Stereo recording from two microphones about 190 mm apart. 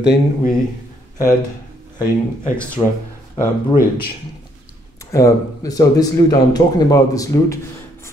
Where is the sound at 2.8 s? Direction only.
20° left (ahead or behind).